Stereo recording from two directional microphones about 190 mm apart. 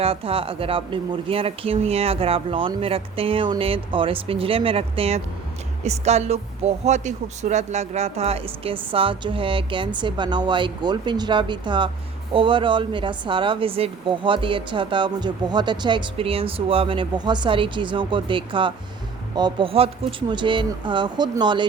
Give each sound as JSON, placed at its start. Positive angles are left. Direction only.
{"t": 0.0, "sound": "a woman's voice", "side_deg": -30}